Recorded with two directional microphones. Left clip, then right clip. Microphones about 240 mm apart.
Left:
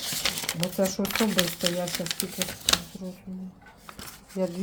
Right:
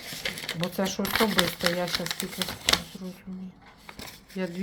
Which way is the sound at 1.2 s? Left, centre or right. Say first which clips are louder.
Right 2 dB; centre.